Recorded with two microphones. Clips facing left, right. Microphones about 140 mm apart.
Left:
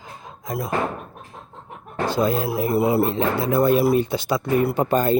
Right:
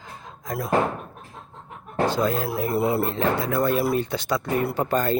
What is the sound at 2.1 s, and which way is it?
Speech, 15° left (ahead or behind).